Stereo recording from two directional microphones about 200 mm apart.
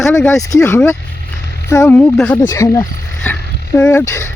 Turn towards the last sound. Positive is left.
turn(degrees=15)  # may be behind; listen again after turning